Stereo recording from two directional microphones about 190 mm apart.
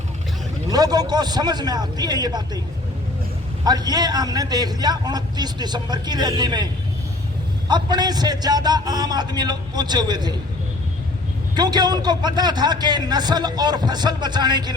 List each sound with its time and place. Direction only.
0.7 s a man's voice: 20° right (ahead or behind)
3.6 s a man's voice: 20° right (ahead or behind)
7.7 s a man's voice: 20° right (ahead or behind)
11.5 s a man's voice: 20° right (ahead or behind)